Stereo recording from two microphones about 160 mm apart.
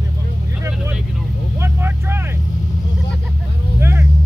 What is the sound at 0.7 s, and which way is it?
Vehicle, 5° right (ahead or behind).